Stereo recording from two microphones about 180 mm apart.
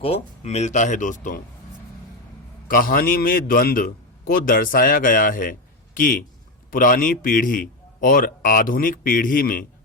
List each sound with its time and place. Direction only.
0.0 s speech: 35° left (ahead or behind)
2.6 s a man's voice: 50° left (ahead or behind)